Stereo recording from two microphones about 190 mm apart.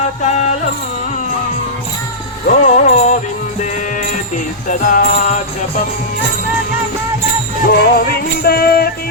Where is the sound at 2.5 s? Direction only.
40° left (ahead or behind).